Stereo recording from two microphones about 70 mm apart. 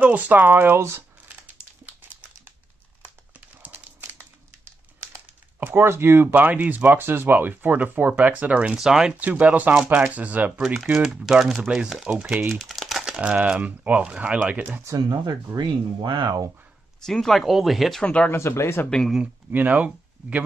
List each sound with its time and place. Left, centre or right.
0.0 s speech: right
1.9 s a sound: right
3.6 s a sound: right
5.0 s typing: right
6.3 s speech: right
9.2 s speech: right
10.6 s speech: centre
12.4 s speech: centre
14.9 s speech: right
17.0 s speech: centre
18.0 s speech: centre
18.3 s speech: left
19.5 s speech: right